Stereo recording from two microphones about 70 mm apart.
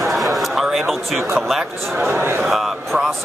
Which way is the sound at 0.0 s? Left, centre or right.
Centre.